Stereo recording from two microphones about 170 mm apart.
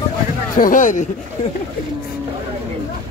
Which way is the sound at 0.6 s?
50° left (ahead or behind).